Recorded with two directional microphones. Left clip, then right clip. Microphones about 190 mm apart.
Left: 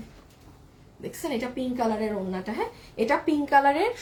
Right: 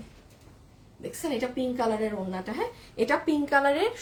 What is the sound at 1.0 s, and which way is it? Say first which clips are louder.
A woman's voice: even; 15° right (ahead or behind).